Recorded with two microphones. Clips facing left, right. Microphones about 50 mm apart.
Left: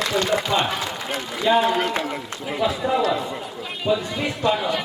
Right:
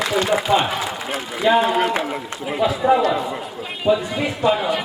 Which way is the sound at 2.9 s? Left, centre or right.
Centre.